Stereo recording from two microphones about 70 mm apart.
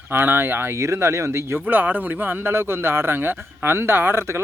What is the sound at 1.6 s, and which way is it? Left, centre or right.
A man's voice, right.